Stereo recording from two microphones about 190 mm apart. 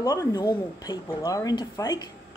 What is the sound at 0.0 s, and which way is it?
Speech, 20° left (ahead or behind).